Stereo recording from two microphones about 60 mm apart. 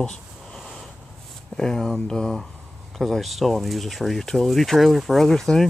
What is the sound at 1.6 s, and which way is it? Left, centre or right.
Speech, centre.